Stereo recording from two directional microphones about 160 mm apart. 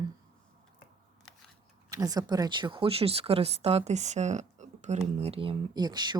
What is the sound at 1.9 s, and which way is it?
Speech, 25° right (ahead or behind).